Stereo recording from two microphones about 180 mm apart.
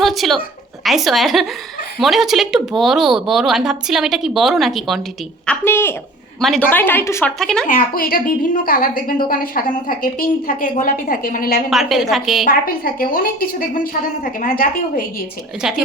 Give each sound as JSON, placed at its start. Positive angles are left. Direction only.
{"t": 0.0, "sound": "a woman's voice", "side_deg": 0}
{"t": 5.5, "sound": "a woman's voice", "side_deg": 15}
{"t": 7.3, "sound": "speech", "side_deg": 5}
{"t": 7.7, "sound": "a woman's voice", "side_deg": 50}
{"t": 11.7, "sound": "speech", "side_deg": 0}
{"t": 12.5, "sound": "a woman's voice", "side_deg": 55}
{"t": 15.6, "sound": "speech", "side_deg": -5}